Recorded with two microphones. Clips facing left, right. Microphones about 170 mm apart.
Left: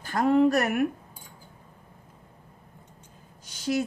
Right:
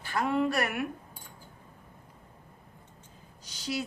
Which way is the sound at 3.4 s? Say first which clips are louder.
Left 7 dB; 50° left (ahead or behind).